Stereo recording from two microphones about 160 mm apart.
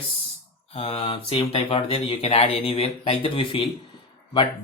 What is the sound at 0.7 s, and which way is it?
Speech, 35° left (ahead or behind).